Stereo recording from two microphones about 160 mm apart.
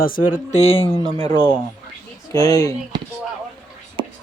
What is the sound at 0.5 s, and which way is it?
Speech, 40° left (ahead or behind).